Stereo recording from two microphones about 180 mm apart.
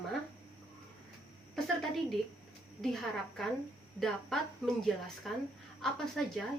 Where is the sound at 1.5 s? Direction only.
Centre (ahead or behind).